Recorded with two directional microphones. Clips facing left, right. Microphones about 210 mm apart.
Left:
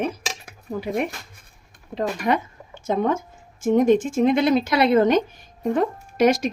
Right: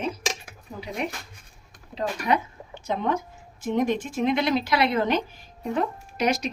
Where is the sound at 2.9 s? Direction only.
50° left (ahead or behind).